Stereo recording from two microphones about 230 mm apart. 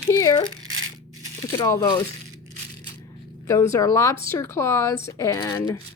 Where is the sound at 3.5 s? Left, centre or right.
Centre.